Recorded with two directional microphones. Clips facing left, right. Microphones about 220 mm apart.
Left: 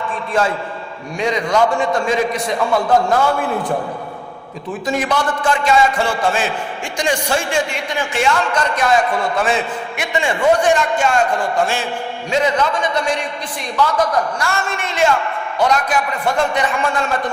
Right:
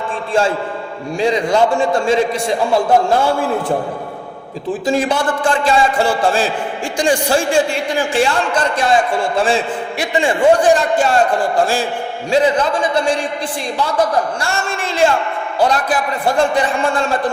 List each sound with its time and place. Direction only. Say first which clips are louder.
1.2 s a man's voice: right 2 dB; 30° right (ahead or behind)
4.9 s a man's voice: right 2 dB; 30° right (ahead or behind)
14.4 s a man's voice: right 1 dB; 30° right (ahead or behind)